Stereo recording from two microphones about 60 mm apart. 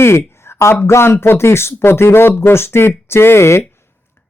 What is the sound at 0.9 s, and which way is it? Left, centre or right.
Speech, left.